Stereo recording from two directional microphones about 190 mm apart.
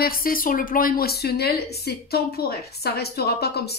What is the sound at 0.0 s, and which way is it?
A woman's voice, 50° left (ahead or behind).